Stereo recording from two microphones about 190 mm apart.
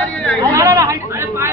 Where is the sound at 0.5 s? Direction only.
15° right (ahead or behind).